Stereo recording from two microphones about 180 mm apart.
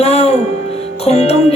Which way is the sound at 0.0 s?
35° left (ahead or behind).